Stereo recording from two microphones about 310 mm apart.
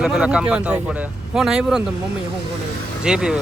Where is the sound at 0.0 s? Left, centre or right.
Centre.